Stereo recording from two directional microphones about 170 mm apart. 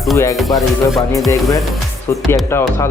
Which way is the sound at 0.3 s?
Centre (ahead or behind).